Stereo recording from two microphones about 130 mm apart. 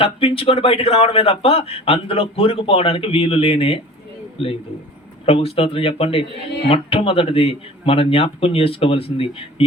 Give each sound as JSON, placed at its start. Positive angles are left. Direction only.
{"t": 0.0, "sound": "a man's voice", "side_deg": 45}